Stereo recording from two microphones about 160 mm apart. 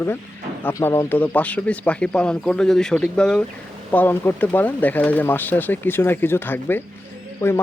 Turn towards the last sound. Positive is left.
turn(degrees=15)  # may be behind; listen again after turning